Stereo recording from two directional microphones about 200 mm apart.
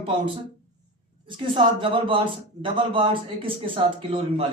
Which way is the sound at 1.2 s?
25° right (ahead or behind).